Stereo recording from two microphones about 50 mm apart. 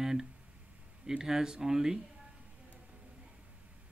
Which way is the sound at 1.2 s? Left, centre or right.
Centre.